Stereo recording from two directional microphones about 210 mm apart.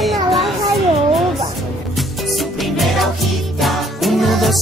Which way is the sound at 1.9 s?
Centre (ahead or behind).